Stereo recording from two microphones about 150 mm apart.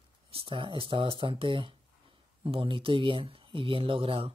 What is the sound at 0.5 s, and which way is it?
Speech, 35° right (ahead or behind).